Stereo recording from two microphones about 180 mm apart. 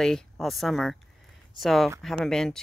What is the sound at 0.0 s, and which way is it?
Speech, centre (ahead or behind).